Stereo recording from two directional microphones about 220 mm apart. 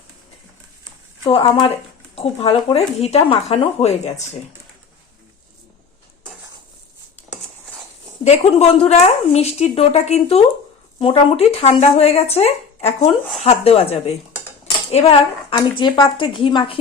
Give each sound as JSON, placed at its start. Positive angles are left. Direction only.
{"t": 1.3, "sound": "a woman's voice", "side_deg": 25}
{"t": 8.2, "sound": "a woman's voice", "side_deg": 30}
{"t": 14.9, "sound": "a woman's voice", "side_deg": 25}